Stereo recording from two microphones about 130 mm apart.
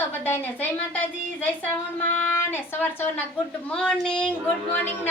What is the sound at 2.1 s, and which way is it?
Speech, 15° left (ahead or behind).